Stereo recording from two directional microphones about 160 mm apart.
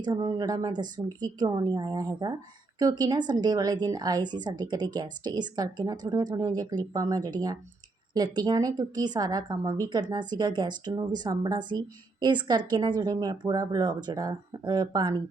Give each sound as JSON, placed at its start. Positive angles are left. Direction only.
{"t": 0.0, "sound": "a woman's voice", "side_deg": -25}